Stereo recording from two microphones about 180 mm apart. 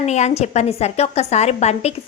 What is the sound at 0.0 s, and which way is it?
A woman's voice, 40° left (ahead or behind).